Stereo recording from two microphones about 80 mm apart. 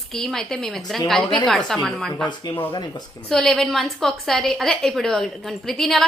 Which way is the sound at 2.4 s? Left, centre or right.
Left.